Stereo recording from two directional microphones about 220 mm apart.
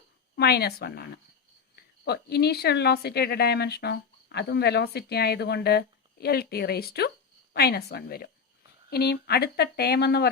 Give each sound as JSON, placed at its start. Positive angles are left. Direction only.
{"t": 0.3, "sound": "a woman's voice", "side_deg": 45}